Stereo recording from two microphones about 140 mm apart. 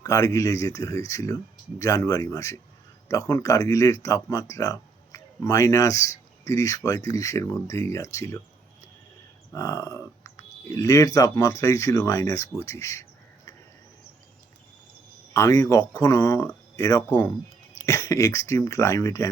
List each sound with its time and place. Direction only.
0.0 s speech: 25° left (ahead or behind)
9.5 s speech: 25° left (ahead or behind)
15.3 s speech: 20° left (ahead or behind)